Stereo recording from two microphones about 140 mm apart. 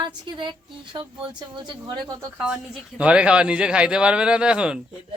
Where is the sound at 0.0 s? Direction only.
35° right (ahead or behind).